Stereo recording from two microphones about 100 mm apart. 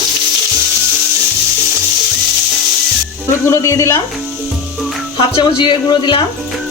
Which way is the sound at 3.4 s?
30° left (ahead or behind).